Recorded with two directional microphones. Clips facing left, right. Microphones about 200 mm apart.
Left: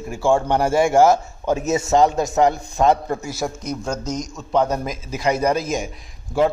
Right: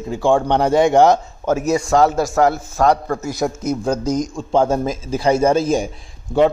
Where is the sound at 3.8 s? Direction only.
30° right (ahead or behind).